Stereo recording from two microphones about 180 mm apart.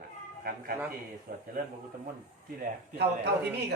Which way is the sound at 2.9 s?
65° right (ahead or behind).